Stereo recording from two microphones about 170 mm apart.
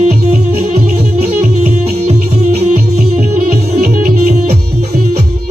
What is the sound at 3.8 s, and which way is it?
Music, 60° right (ahead or behind).